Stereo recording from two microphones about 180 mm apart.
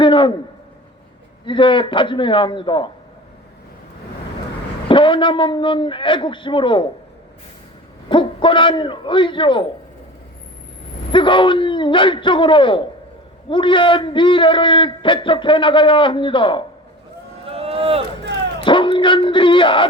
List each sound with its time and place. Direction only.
0.0 s speech: 25° left (ahead or behind)
1.5 s a man's voice: 30° left (ahead or behind)
4.9 s a man's voice: 30° left (ahead or behind)
8.1 s a man's voice: 25° left (ahead or behind)
11.1 s a man's voice: 25° left (ahead or behind)
17.4 s run: 35° right (ahead or behind)
18.6 s speech: 30° left (ahead or behind)